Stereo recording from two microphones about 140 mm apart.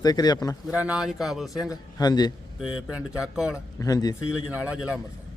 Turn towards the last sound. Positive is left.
turn(degrees=-10)  # may be behind; listen again after turning